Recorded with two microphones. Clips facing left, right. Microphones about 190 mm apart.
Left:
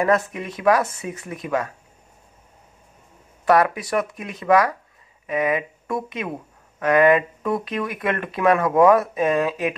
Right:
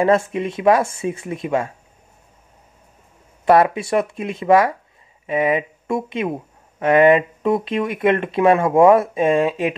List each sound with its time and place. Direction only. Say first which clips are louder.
0.0 s speech: right 4 dB; 25° right (ahead or behind)
3.4 s speech: right 3 dB; 25° right (ahead or behind)